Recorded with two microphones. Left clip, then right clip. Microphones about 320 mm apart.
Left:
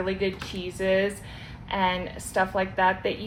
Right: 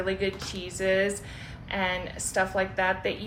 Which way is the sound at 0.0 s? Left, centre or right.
Centre.